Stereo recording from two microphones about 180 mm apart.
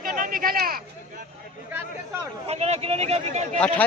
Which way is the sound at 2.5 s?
35° right (ahead or behind).